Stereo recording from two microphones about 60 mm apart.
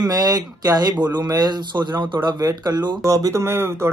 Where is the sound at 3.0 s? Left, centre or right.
Right.